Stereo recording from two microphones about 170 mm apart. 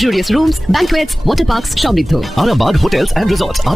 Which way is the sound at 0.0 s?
Centre (ahead or behind).